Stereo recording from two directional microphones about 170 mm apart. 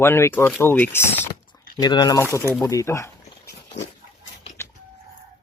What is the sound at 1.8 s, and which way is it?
Speech, 25° left (ahead or behind).